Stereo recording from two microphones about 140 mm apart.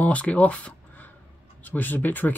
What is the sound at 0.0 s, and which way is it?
Speech, 10° left (ahead or behind).